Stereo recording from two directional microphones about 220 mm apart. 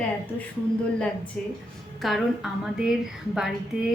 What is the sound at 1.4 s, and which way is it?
Speech, 5° left (ahead or behind).